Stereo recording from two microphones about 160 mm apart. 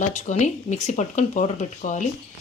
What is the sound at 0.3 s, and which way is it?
A woman's voice, 45° left (ahead or behind).